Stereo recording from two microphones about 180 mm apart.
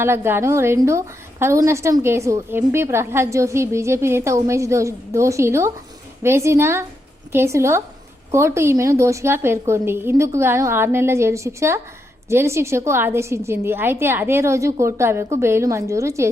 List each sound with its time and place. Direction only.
0.0 s a woman's voice: 15° right (ahead or behind)